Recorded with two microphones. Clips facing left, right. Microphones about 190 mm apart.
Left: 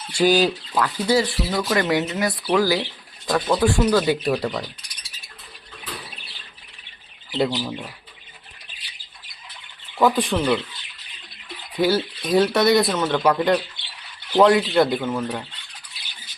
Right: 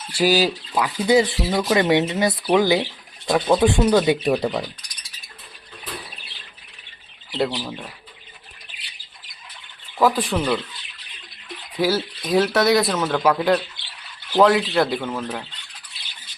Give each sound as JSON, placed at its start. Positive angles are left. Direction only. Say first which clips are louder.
{"t": 0.1, "sound": "speech", "louder": "left 1 dB", "side_deg": -5}
{"t": 1.0, "sound": "speech", "louder": "right 5 dB", "side_deg": -20}
{"t": 7.3, "sound": "speech", "louder": "left 1 dB", "side_deg": 0}
{"t": 10.0, "sound": "speech", "louder": "even", "side_deg": 0}
{"t": 11.8, "sound": "speech", "louder": "left 1 dB", "side_deg": 0}